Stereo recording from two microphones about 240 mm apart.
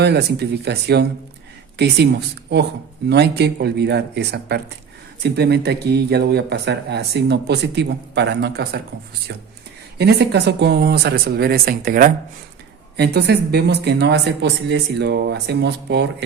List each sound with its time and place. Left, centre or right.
0.0 s speech: right
3.1 s speech: right
10.0 s speech: right